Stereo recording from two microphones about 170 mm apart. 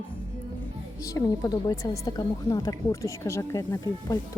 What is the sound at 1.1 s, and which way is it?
Speech, 20° left (ahead or behind).